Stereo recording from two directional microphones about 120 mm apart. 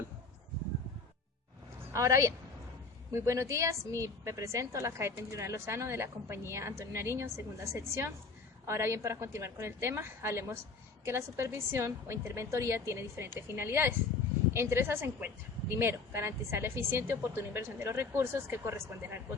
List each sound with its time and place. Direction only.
1.8 s a woman's voice: 25° right (ahead or behind)